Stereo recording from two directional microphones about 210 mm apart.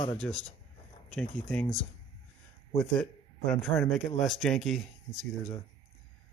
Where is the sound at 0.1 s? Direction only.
5° left (ahead or behind).